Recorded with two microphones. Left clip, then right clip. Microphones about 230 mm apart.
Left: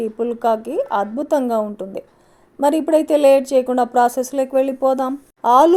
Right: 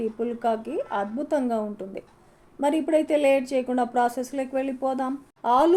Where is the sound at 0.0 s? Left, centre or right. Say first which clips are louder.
Left 7 dB; left.